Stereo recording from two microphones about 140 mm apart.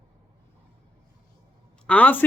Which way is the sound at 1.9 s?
10° left (ahead or behind).